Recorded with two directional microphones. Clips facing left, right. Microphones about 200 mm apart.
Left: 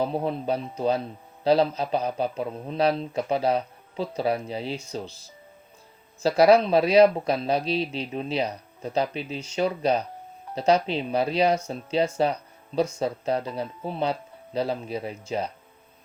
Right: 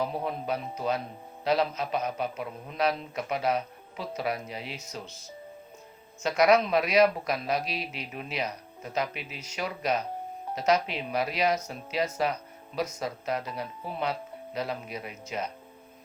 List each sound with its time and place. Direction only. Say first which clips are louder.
0.0 s speech: left 5 dB; 30° left (ahead or behind)